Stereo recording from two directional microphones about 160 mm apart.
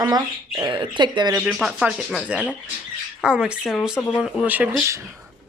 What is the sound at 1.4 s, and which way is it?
Speech, 5° right (ahead or behind).